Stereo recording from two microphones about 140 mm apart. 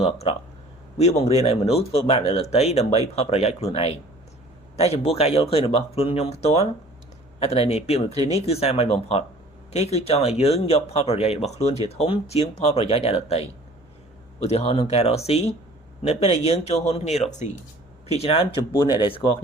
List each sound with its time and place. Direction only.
0.0 s speech: 45° left (ahead or behind)
18.7 s speech: 25° left (ahead or behind)